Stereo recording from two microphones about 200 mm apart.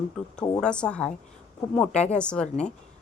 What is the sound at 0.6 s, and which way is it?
A woman's voice, 5° left (ahead or behind).